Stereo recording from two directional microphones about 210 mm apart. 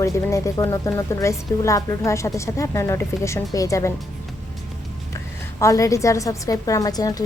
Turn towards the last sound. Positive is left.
turn(degrees=15)  # may be behind; listen again after turning